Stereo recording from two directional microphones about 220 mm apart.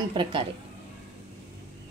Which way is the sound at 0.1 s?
20° right (ahead or behind).